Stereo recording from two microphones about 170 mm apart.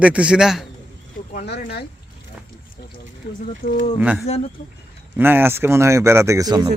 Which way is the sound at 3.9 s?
10° right (ahead or behind).